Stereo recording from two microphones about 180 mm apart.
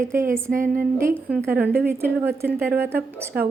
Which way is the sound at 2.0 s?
60° right (ahead or behind).